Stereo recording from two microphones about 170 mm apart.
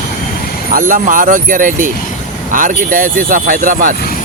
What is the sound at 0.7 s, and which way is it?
Speech, 55° right (ahead or behind).